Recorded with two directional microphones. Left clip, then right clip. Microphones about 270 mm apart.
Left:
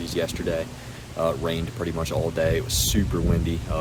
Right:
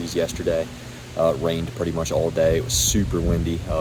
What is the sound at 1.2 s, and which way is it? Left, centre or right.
Speech, right.